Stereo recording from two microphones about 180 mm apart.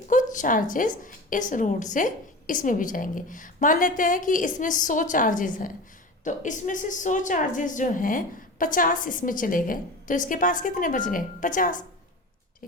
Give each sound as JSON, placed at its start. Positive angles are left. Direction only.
{"t": 0.1, "sound": "a woman's voice", "side_deg": 45}